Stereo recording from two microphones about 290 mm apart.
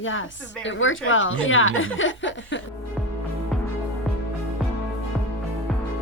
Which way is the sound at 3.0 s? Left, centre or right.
Centre.